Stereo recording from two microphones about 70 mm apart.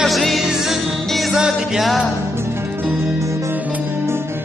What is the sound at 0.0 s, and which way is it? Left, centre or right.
Music, centre.